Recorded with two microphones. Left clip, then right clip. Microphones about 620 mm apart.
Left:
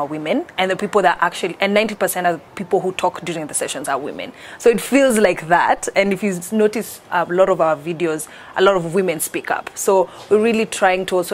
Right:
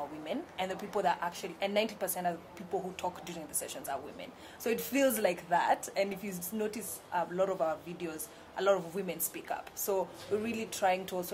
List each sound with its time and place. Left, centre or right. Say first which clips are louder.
0.2 s a woman's voice: left 18 dB; left